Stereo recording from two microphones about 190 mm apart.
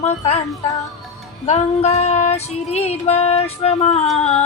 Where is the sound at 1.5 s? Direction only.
35° left (ahead or behind).